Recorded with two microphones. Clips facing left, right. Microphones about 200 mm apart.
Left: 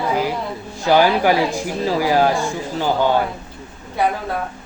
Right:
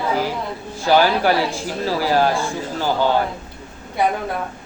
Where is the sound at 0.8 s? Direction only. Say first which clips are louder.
Left 1 dB; 15° left (ahead or behind).